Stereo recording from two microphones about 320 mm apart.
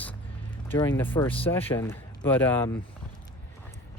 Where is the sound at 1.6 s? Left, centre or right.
Centre.